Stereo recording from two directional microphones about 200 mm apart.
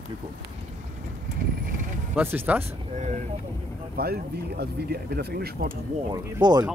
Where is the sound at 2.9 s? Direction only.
35° right (ahead or behind).